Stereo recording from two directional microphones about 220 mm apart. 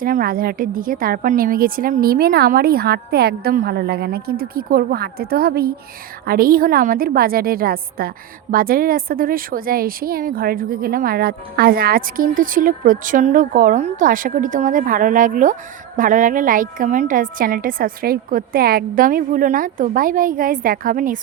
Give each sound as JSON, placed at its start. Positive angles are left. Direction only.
{"t": 0.0, "sound": "a woman's voice", "side_deg": -40}